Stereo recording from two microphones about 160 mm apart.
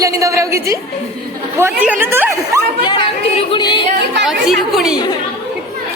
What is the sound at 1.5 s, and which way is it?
A woman's voice, 15° right (ahead or behind).